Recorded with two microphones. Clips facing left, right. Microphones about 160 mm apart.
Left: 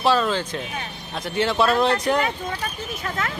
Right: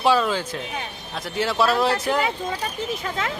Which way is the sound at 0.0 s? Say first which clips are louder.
Even; 10° right (ahead or behind).